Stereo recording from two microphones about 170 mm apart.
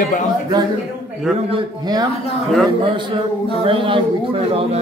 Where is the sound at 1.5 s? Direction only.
25° right (ahead or behind).